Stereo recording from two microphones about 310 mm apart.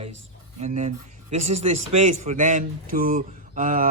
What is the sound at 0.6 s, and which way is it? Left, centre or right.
A man's voice, right.